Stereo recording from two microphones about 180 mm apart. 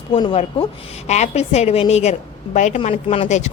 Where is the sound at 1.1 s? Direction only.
40° left (ahead or behind).